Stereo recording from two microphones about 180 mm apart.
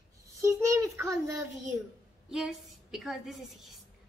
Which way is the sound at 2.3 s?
Centre (ahead or behind).